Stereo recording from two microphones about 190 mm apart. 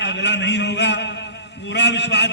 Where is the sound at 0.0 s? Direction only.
65° left (ahead or behind).